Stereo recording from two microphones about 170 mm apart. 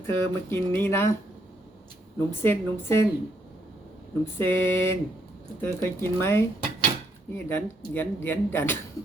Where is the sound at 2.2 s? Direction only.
15° left (ahead or behind).